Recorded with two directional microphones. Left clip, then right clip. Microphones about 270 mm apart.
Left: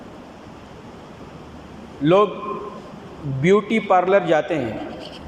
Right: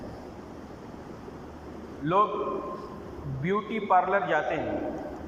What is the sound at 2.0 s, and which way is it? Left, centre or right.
Speech, left.